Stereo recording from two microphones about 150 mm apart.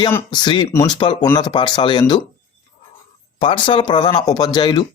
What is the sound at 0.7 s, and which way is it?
Speech, 20° left (ahead or behind).